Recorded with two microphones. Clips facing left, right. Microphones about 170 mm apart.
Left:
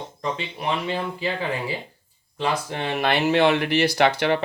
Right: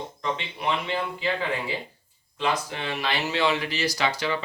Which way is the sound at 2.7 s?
50° left (ahead or behind).